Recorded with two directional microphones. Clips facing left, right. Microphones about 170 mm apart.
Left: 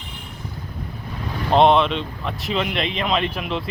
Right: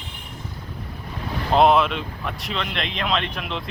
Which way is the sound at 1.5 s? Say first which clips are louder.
Left 1 dB; 5° right (ahead or behind).